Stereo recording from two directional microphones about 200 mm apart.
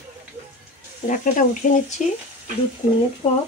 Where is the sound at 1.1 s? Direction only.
40° left (ahead or behind).